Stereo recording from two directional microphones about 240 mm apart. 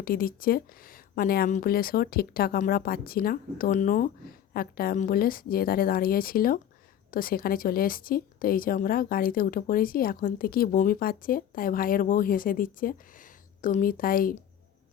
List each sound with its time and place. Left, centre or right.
0.0 s speech: left